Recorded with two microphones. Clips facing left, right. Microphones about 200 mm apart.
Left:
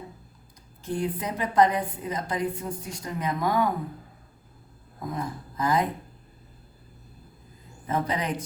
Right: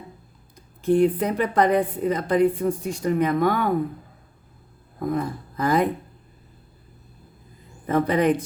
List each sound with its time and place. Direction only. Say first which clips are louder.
0.9 s a woman's voice: right 10 dB; 65° right (ahead or behind)
5.0 s a woman's voice: right 7 dB; 60° right (ahead or behind)
7.9 s a woman's voice: right 8 dB; 60° right (ahead or behind)